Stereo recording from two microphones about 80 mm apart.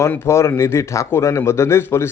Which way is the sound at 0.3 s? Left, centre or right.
Left.